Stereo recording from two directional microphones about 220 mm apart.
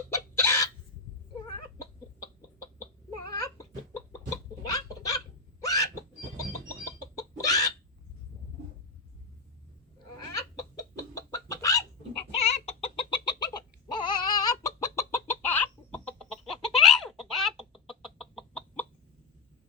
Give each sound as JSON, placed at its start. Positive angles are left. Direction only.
{"t": 0.3, "sound": "a sound", "side_deg": 10}
{"t": 3.4, "sound": "chicken", "side_deg": 15}
{"t": 5.6, "sound": "a sound", "side_deg": 15}
{"t": 6.8, "sound": "chicken", "side_deg": 15}
{"t": 10.3, "sound": "chicken", "side_deg": 15}
{"t": 12.3, "sound": "chicken", "side_deg": 30}